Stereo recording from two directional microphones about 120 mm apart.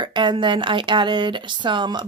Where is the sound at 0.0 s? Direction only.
40° right (ahead or behind).